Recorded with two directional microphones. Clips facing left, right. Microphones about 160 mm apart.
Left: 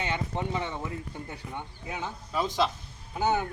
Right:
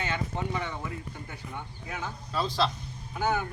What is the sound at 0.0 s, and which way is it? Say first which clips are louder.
A man's voice: left 1 dB; 20° left (ahead or behind).